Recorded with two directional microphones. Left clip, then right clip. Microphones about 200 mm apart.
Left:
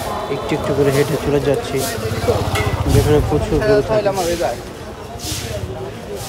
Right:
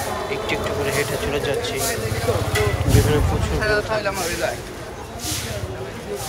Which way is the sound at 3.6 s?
50° left (ahead or behind).